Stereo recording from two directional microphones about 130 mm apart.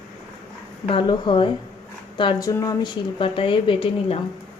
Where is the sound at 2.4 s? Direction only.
25° left (ahead or behind); by 4.2 s 45° left (ahead or behind).